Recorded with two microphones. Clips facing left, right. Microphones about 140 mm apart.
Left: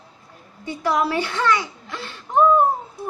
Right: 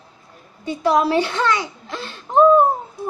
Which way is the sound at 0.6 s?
20° right (ahead or behind).